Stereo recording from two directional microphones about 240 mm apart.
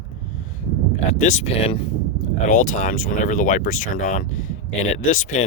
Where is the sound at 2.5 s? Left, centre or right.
Left.